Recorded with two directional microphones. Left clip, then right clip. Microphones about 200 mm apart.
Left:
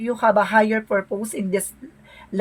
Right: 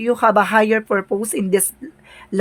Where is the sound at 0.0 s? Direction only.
50° right (ahead or behind).